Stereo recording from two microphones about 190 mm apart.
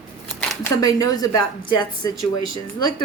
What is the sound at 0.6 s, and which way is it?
A woman's voice, 20° left (ahead or behind).